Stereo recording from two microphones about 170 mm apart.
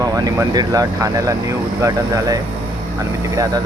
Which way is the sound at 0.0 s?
20° right (ahead or behind).